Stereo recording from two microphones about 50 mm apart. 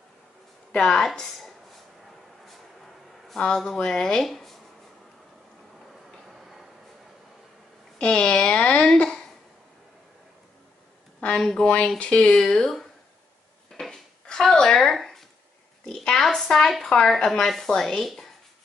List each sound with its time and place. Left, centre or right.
0.7 s a woman's voice: centre
3.3 s a woman's voice: centre
6.1 s tick-tock: centre
8.0 s speech: left
11.3 s a woman's voice: centre
11.6 s a woman's voice: left
13.7 s a sound: centre
14.7 s a woman's voice: centre